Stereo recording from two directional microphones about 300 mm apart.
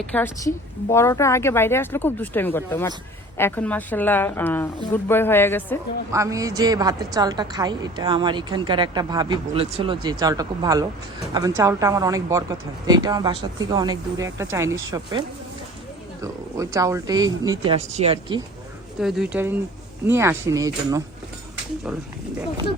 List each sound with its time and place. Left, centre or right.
0.1 s a woman's voice: centre
6.1 s a woman's voice: centre
16.2 s a woman's voice: centre
18.9 s a woman's voice: centre